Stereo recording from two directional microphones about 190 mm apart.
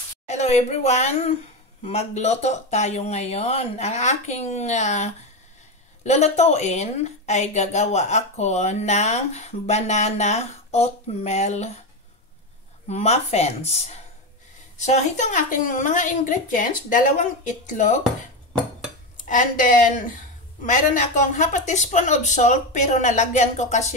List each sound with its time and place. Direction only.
0.3 s a woman's voice: 35° left (ahead or behind)
12.8 s a woman's voice: 35° left (ahead or behind)
19.2 s a woman's voice: 45° left (ahead or behind)